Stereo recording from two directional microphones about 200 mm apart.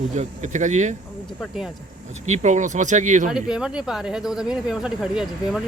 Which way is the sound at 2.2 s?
35° right (ahead or behind).